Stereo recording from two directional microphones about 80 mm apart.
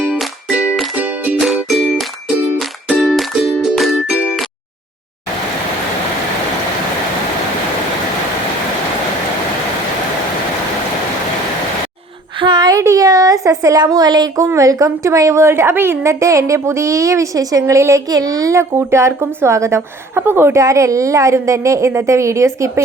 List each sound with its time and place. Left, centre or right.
0.9 s music: centre
1.4 s music: centre
4.1 s music: centre
12.4 s a sound: right
12.7 s a sound: right
14.4 s speech: right
18.1 s speech: right